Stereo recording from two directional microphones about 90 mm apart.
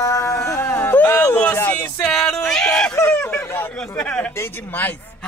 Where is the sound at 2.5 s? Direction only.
5° left (ahead or behind).